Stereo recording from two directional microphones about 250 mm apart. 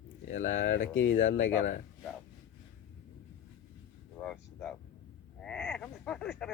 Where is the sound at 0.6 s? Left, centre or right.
Left.